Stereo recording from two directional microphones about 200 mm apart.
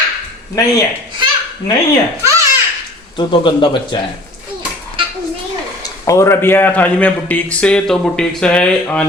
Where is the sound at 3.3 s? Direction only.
25° left (ahead or behind).